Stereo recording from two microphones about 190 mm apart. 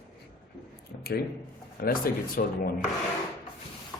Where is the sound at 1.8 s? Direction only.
50° left (ahead or behind).